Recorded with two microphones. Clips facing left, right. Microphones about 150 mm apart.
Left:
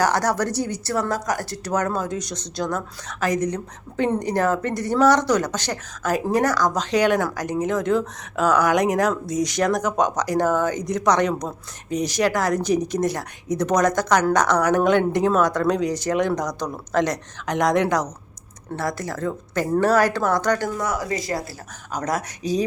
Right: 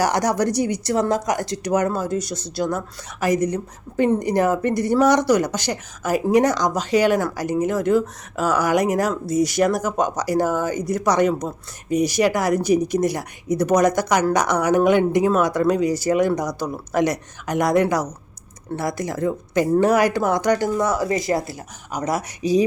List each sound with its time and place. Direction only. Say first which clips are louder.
0.0 s speech: right 1 dB; 15° right (ahead or behind)
6.4 s speech: right 1 dB; 20° right (ahead or behind)
6.7 s speech: right 1 dB; 5° right (ahead or behind)
20.7 s speech: right 5 dB; 25° right (ahead or behind)
21.9 s speech: right 1 dB; 10° right (ahead or behind)